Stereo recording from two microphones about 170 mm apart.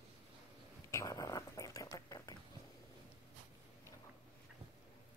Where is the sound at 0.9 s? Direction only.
20° left (ahead or behind).